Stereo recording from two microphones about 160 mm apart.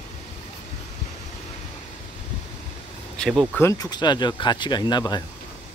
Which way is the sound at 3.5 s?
15° left (ahead or behind).